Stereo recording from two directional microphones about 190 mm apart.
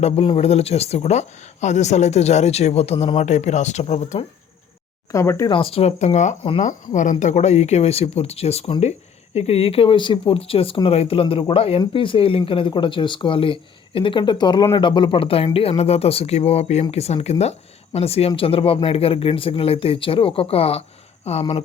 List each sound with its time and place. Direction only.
0.0 s speech: 30° left (ahead or behind)
5.1 s speech: 15° left (ahead or behind)
5.5 s a woman's voice: 30° left (ahead or behind)